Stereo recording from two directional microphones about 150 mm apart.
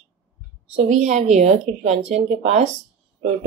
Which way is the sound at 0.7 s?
50° right (ahead or behind).